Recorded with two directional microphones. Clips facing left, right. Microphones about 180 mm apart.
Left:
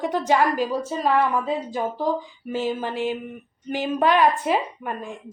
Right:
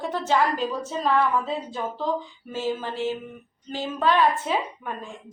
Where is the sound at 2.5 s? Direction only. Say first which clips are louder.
Left 3 dB; 15° left (ahead or behind).